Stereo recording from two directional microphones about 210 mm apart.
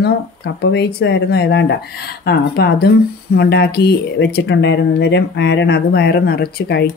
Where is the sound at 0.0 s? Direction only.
55° left (ahead or behind).